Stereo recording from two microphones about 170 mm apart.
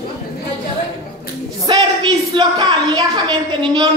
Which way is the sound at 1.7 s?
25° right (ahead or behind).